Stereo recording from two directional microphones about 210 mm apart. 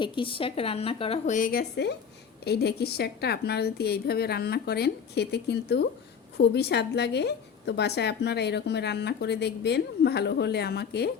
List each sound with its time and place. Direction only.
0.0 s a woman's voice: 25° left (ahead or behind); by 11.1 s 50° left (ahead or behind)